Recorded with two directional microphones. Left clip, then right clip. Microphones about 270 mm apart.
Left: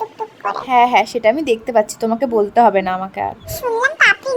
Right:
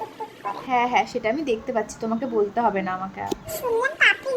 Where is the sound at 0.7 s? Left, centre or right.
Left.